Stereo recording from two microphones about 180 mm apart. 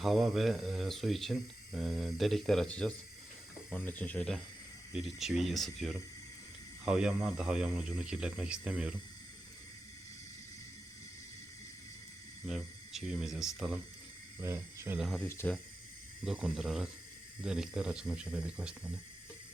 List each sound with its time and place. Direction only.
0.0 s speech: centre (ahead or behind)
12.5 s speech: centre (ahead or behind)
14.4 s speech: 15° right (ahead or behind)
14.9 s speech: centre (ahead or behind)
15.3 s speech: 15° left (ahead or behind)
16.2 s speech: centre (ahead or behind)